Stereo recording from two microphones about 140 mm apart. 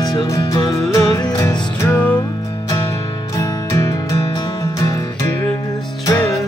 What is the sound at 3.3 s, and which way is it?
Music, 25° left (ahead or behind).